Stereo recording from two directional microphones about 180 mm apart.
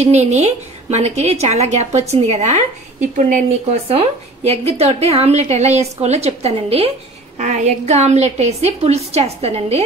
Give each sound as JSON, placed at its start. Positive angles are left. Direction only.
{"t": 0.0, "sound": "a woman's voice", "side_deg": -40}